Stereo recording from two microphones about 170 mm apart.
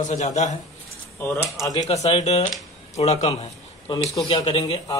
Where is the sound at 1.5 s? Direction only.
20° left (ahead or behind).